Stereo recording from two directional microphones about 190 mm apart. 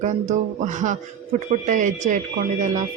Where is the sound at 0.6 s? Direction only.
40° right (ahead or behind).